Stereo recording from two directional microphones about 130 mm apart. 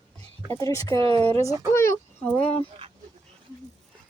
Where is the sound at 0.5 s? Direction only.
25° left (ahead or behind).